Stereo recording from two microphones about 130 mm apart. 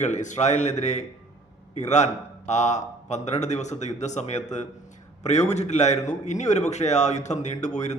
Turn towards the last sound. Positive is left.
turn(degrees=65)  # may be behind; listen again after turning